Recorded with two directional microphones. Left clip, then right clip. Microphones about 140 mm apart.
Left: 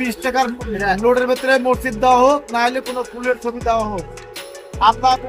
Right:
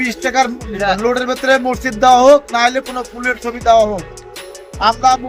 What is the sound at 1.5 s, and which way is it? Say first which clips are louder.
Music: right 2 dB; 15° right (ahead or behind).